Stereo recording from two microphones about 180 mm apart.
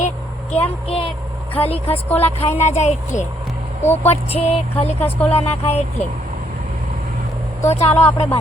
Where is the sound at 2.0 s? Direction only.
10° left (ahead or behind).